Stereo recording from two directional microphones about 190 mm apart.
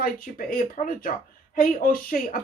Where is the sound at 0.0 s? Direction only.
45° left (ahead or behind).